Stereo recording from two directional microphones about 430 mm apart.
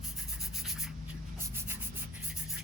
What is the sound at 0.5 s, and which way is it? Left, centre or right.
Rub, centre.